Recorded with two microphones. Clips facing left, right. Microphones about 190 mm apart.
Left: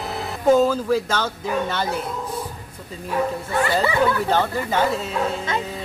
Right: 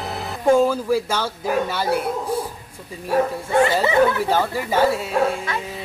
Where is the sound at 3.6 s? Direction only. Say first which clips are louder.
Right 2 dB; 20° right (ahead or behind).